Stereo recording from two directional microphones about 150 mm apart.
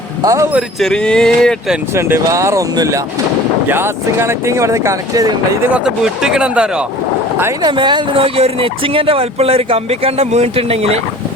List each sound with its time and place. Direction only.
0.2 s speech: 20° right (ahead or behind)
0.8 s speech: 5° left (ahead or behind)
1.9 s speech: 15° right (ahead or behind)
5.7 s speech: 5° right (ahead or behind)
7.6 s speech: 30° right (ahead or behind)